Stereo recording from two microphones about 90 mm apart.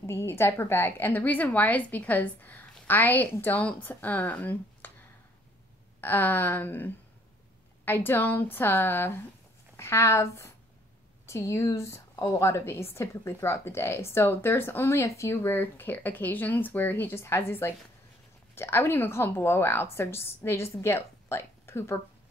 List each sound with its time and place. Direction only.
0.0 s a woman's voice: 30° left (ahead or behind)
5.9 s a woman's voice: 25° left (ahead or behind)